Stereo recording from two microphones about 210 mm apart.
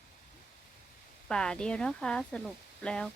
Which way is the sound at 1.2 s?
5° left (ahead or behind).